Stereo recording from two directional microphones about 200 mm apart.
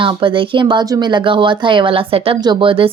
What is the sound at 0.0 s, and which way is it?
A woman's voice, 25° right (ahead or behind).